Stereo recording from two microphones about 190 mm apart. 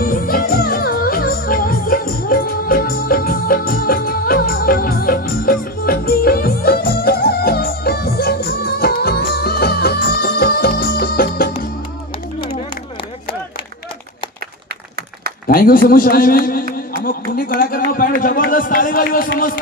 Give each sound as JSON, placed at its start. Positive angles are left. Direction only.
{"t": 0.0, "sound": "music", "side_deg": 50}
{"t": 15.4, "sound": "a man's voice", "side_deg": 50}
{"t": 16.7, "sound": "a sound", "side_deg": 50}